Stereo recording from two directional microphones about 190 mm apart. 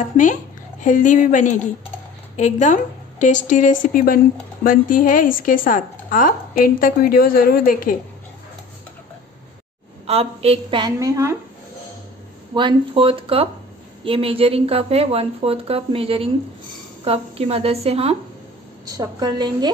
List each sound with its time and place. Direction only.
0.2 s a woman's voice: 40° left (ahead or behind)
10.0 s a woman's voice: 30° right (ahead or behind); by 11.3 s 15° right (ahead or behind)
12.5 s a woman's voice: 25° right (ahead or behind)
18.9 s a woman's voice: 20° right (ahead or behind)